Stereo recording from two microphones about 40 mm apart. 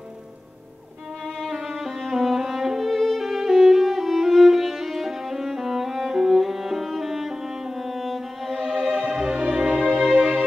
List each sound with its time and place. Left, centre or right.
1.5 s music: centre
2.9 s violin: centre
9.6 s music: centre